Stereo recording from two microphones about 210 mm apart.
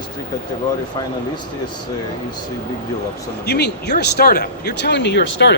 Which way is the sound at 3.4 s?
50° left (ahead or behind).